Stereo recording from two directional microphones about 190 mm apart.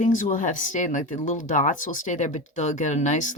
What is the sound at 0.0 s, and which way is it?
Speech, 45° left (ahead or behind).